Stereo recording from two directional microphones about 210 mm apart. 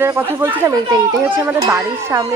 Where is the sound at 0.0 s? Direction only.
10° right (ahead or behind).